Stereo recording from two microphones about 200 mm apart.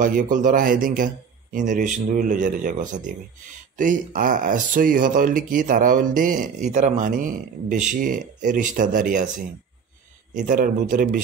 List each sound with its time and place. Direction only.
0.3 s speech: 40° right (ahead or behind)
10.3 s speech: 40° right (ahead or behind)